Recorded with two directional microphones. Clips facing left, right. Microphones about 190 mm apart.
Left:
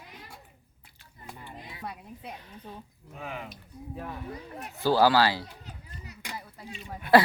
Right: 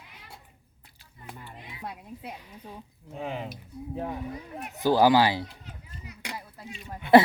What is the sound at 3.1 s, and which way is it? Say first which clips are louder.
A woman's voice: right 5 dB; 30° right (ahead or behind).